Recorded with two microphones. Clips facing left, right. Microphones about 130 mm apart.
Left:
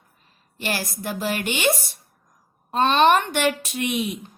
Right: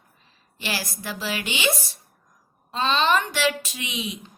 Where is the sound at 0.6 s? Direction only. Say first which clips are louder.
Left 3 dB; 50° left (ahead or behind).